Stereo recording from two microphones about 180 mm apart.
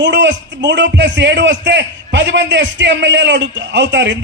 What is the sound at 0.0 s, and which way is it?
A man's voice, 85° right.